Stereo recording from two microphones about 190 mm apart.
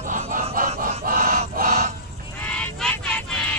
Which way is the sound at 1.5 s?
40° right (ahead or behind).